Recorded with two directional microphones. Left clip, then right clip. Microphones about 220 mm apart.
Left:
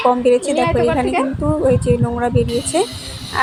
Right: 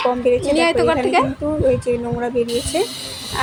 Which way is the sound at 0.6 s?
20° right (ahead or behind).